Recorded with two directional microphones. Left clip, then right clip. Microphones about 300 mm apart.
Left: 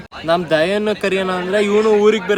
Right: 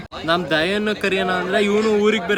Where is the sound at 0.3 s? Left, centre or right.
Centre.